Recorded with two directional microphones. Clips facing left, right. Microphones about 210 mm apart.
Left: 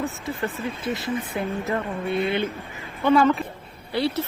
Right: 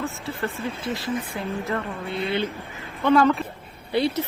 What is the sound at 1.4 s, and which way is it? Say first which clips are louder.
Speech: left 2 dB; 15° left (ahead or behind).